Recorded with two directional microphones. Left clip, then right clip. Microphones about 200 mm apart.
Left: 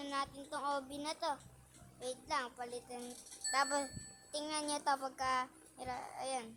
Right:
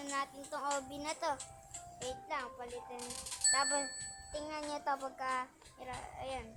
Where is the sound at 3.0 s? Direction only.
40° right (ahead or behind).